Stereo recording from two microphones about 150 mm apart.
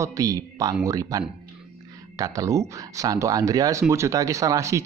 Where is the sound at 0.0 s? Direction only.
20° right (ahead or behind).